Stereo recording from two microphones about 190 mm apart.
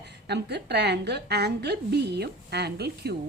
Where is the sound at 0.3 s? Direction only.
60° right (ahead or behind).